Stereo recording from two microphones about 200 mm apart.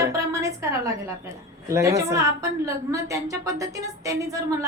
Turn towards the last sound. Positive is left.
turn(degrees=-15)  # may be behind; listen again after turning